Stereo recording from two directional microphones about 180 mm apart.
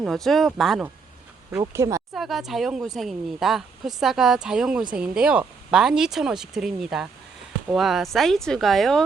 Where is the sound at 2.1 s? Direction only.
Centre (ahead or behind).